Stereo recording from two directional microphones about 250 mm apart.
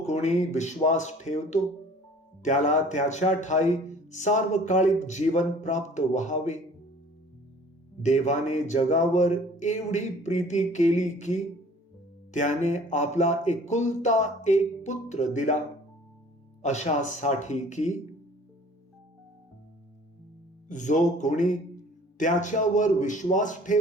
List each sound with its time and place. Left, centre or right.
0.0 s a man's voice: left
8.0 s a man's voice: left
16.6 s a man's voice: left
20.7 s a man's voice: left